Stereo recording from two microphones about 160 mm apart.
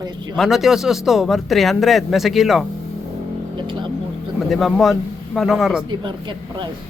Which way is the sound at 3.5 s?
30° right (ahead or behind).